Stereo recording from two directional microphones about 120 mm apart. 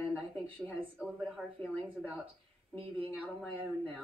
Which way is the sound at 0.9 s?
5° right (ahead or behind).